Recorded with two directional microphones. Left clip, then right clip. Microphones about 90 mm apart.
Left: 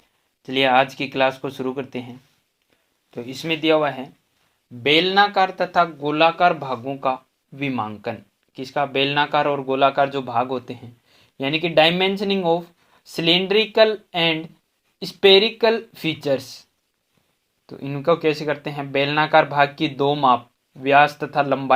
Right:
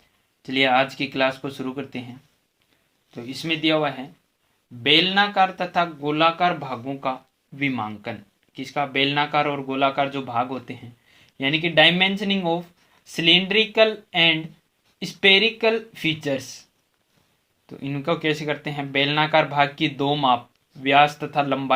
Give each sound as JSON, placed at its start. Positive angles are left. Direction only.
{"t": 0.4, "sound": "speech", "side_deg": 35}
{"t": 3.2, "sound": "speech", "side_deg": 40}
{"t": 8.5, "sound": "speech", "side_deg": 30}
{"t": 17.7, "sound": "speech", "side_deg": 20}